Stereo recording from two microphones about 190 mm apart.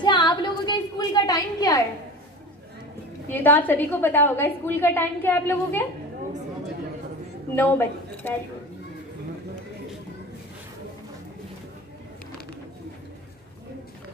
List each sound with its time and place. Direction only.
0.0 s a sound: 25° left (ahead or behind)
3.3 s a woman's voice: 10° left (ahead or behind)
7.5 s a woman's voice: 10° left (ahead or behind)